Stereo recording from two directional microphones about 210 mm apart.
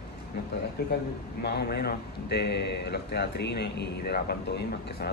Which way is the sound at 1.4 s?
50° left (ahead or behind).